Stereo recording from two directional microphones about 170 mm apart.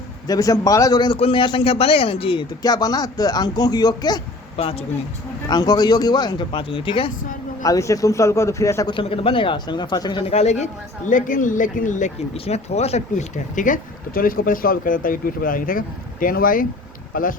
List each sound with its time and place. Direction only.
0.3 s a man's voice: 20° left (ahead or behind)
7.6 s a man's voice: 20° left (ahead or behind); by 10.7 s 40° left (ahead or behind)
11.1 s speech: 50° left (ahead or behind)